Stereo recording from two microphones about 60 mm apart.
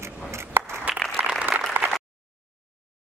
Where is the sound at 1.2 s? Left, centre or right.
Right.